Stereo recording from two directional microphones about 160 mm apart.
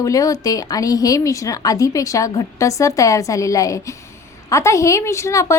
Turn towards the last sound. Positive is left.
turn(degrees=20)  # may be behind; listen again after turning